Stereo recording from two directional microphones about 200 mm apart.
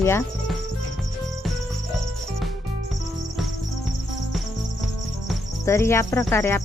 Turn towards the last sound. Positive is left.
turn(degrees=10)  # may be behind; listen again after turning